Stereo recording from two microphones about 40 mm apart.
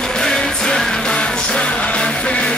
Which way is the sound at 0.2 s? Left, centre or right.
Centre.